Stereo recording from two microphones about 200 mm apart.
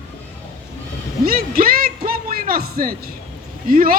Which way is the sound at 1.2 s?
45° right (ahead or behind).